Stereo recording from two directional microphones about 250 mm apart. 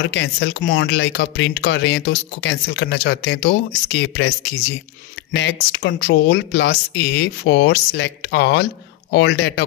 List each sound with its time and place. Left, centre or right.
0.0 s speech: left
5.3 s speech: left